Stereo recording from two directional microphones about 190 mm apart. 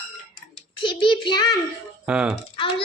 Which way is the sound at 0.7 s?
25° left (ahead or behind).